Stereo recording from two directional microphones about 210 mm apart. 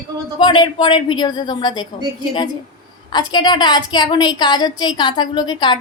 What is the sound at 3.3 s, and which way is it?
A woman's voice, 20° left (ahead or behind).